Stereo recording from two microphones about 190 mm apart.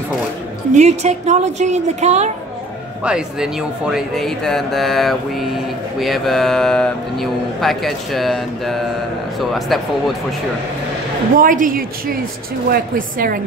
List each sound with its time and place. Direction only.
0.7 s a woman's voice: 35° right (ahead or behind)
3.0 s speech: 5° right (ahead or behind)
11.3 s speech: 45° right (ahead or behind)